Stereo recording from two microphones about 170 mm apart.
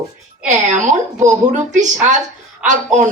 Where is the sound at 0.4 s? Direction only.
45° right (ahead or behind).